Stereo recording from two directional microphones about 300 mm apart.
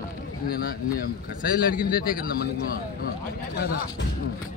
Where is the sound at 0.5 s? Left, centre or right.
Left.